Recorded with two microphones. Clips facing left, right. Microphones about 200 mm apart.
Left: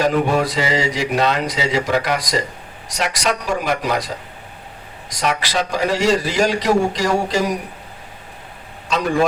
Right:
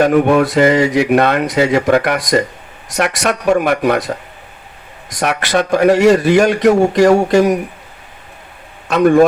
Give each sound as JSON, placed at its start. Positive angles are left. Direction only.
{"t": 0.0, "sound": "a man's voice", "side_deg": -60}
{"t": 5.1, "sound": "a man's voice", "side_deg": -60}
{"t": 8.9, "sound": "a man's voice", "side_deg": -55}